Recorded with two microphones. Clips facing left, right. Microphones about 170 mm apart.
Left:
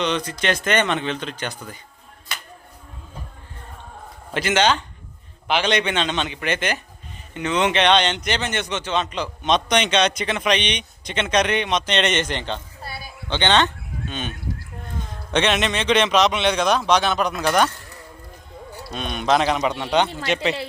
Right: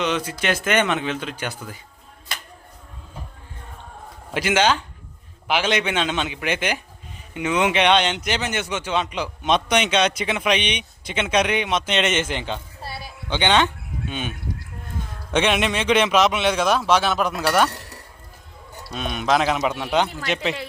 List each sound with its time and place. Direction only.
0.0 s speech: 5° right (ahead or behind)
4.3 s a man's voice: 10° right (ahead or behind)
17.7 s a sound: 70° right (ahead or behind)
18.9 s a man's voice: 5° right (ahead or behind)